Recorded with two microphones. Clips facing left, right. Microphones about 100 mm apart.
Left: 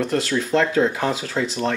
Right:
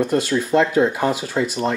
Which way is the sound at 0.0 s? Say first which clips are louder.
Right 3 dB; 15° right (ahead or behind).